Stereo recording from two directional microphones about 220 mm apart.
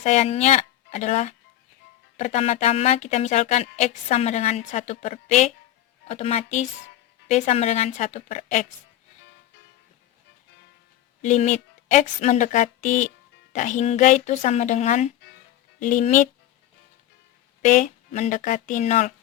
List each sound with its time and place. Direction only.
0.0 s speech: 30° left (ahead or behind)
11.2 s speech: 30° left (ahead or behind)
17.6 s speech: 35° left (ahead or behind)